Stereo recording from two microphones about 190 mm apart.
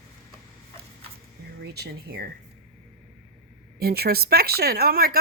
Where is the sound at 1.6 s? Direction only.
55° right (ahead or behind).